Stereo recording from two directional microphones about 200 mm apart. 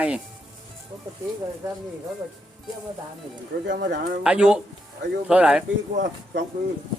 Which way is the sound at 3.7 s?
50° right (ahead or behind).